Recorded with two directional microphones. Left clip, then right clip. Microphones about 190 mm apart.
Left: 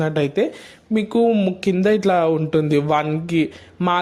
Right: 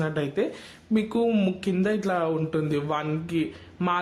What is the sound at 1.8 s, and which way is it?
A man's voice, 35° left (ahead or behind).